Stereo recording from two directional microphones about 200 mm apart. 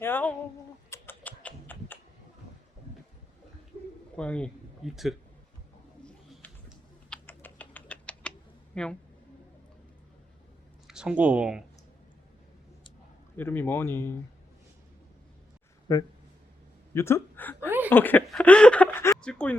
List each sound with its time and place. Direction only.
0.0 s a sound: 10° left (ahead or behind)
0.9 s rodents: 10° left (ahead or behind)
4.2 s a man's voice: 5° left (ahead or behind)
6.0 s typing: 5° left (ahead or behind)
8.7 s speech: 5° left (ahead or behind)
10.8 s speech: 5° right (ahead or behind)
13.3 s speech: 10° left (ahead or behind)
15.9 s speech: 15° left (ahead or behind)